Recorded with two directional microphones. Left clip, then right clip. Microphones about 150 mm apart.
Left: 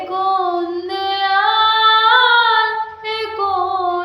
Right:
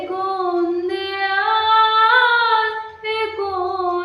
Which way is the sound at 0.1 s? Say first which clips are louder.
Left 5 dB; 20° right (ahead or behind).